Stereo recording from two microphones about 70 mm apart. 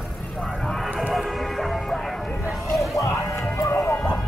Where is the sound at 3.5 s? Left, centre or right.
Left.